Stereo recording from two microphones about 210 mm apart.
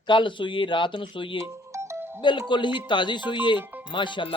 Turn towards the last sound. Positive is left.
turn(degrees=20)  # may be behind; listen again after turning